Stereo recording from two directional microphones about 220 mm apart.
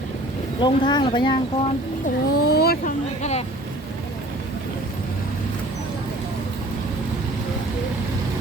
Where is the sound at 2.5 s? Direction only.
45° left (ahead or behind).